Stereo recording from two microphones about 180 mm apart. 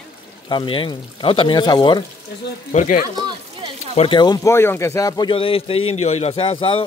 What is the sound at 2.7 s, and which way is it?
Speech, 45° left (ahead or behind).